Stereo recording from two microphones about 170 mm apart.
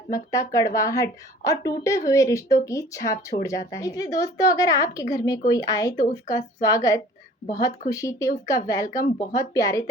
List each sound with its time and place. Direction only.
0.1 s speech: 20° left (ahead or behind)